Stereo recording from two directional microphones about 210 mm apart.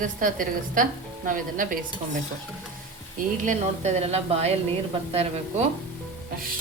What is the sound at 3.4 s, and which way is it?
A woman's voice, 35° right (ahead or behind).